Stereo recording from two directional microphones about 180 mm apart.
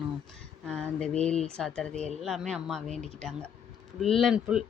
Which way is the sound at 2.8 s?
40° right (ahead or behind).